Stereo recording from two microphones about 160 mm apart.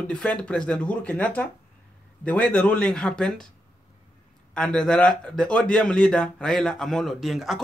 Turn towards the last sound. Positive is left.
turn(degrees=0)  # may be behind; listen again after turning